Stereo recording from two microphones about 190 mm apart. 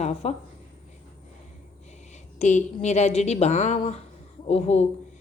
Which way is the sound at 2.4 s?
40° left (ahead or behind).